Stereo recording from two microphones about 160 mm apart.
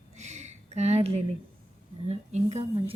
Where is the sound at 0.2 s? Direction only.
45° right (ahead or behind).